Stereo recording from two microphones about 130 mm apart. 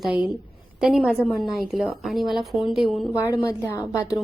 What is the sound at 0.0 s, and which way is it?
A woman's voice, 10° right (ahead or behind).